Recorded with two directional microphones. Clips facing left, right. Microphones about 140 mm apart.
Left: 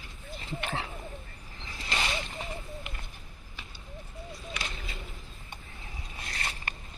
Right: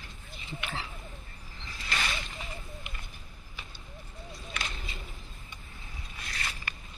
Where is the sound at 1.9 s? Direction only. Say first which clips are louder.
Left 2 dB; 25° left (ahead or behind).